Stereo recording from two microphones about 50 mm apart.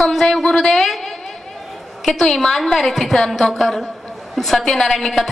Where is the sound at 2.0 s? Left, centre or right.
Centre.